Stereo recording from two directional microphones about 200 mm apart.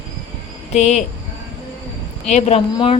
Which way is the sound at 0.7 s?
35° left (ahead or behind).